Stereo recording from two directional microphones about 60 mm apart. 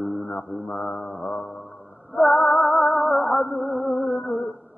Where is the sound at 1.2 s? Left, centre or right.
Left.